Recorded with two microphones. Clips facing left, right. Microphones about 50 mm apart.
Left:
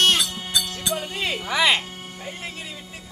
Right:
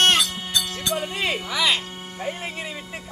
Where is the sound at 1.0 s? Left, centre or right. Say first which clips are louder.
Right 2 dB; centre.